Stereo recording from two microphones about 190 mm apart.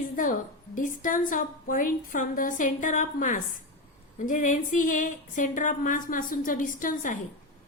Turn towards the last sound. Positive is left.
turn(degrees=45)  # may be behind; listen again after turning